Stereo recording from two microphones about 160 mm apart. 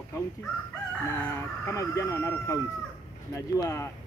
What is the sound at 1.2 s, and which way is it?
Speech, 20° left (ahead or behind).